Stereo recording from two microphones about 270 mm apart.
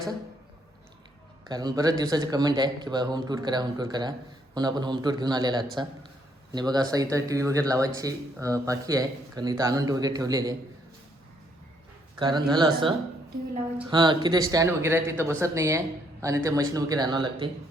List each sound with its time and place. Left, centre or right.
1.5 s speech: centre
12.2 s speech: centre
13.9 s speech: centre